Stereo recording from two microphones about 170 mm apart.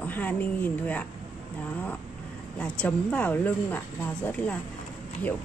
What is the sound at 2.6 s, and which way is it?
A woman's voice, 5° left (ahead or behind).